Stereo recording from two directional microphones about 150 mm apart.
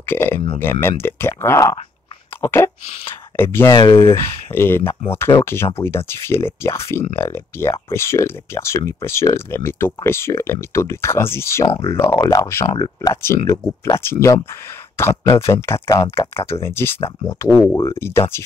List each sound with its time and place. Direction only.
0.0 s speech: 15° left (ahead or behind)
3.7 s speech: 35° left (ahead or behind)
4.0 s speech: 15° left (ahead or behind)
11.6 s speech: 40° left (ahead or behind)
11.9 s speech: 15° left (ahead or behind)